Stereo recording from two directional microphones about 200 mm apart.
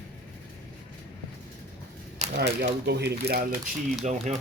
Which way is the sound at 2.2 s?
35° right (ahead or behind).